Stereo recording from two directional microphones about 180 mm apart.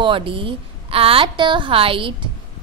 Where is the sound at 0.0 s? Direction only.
30° right (ahead or behind).